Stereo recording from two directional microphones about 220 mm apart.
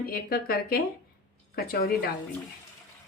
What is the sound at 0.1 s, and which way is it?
Speech, 45° left (ahead or behind).